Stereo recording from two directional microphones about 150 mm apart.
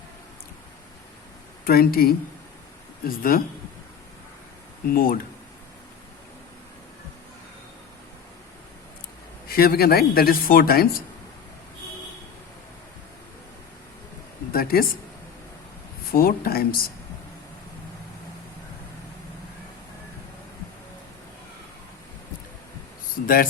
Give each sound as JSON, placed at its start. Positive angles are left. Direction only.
{"t": 1.6, "sound": "speech", "side_deg": 75}
{"t": 4.9, "sound": "speech", "side_deg": 70}
{"t": 9.5, "sound": "speech", "side_deg": 85}
{"t": 14.5, "sound": "speech", "side_deg": 75}
{"t": 16.1, "sound": "speech", "side_deg": 80}
{"t": 23.2, "sound": "speech", "side_deg": 70}